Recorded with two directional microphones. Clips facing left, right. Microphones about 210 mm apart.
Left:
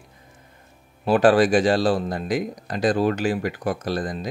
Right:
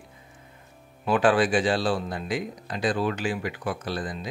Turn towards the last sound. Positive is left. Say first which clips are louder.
# left 5 dB
turn(degrees=40)  # may be behind; listen again after turning